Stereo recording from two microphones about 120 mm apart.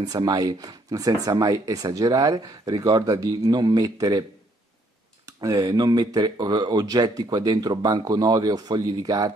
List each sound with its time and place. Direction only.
0.0 s speech: 35° right (ahead or behind)
5.2 s speech: 30° right (ahead or behind)